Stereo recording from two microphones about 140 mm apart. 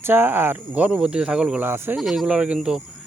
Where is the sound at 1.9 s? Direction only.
Centre (ahead or behind).